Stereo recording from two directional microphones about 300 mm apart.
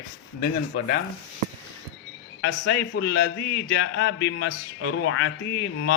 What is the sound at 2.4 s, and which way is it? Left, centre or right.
A man's voice, left.